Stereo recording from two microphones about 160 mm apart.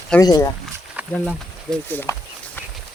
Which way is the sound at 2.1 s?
20° left (ahead or behind).